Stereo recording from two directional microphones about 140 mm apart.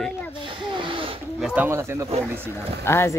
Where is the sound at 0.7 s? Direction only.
35° right (ahead or behind).